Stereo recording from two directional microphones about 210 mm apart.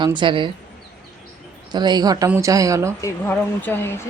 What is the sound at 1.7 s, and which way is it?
Speech, 20° right (ahead or behind).